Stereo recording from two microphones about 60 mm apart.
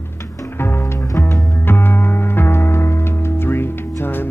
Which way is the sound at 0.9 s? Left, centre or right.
Left.